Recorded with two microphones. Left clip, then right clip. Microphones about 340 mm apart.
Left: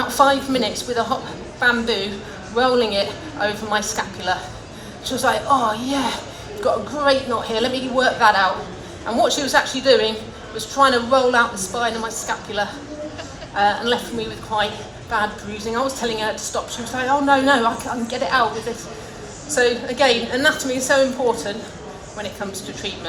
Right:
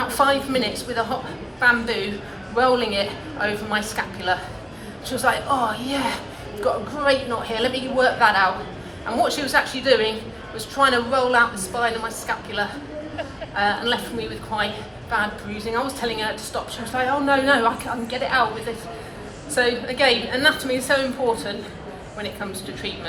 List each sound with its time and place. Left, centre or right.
0.1 s a woman's voice: left
19.5 s a woman's voice: left